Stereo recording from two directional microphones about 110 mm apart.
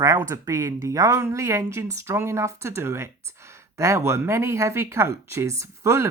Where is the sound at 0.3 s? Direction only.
30° right (ahead or behind).